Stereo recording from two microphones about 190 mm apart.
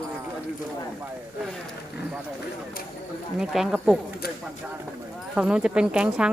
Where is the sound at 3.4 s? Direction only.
Centre (ahead or behind).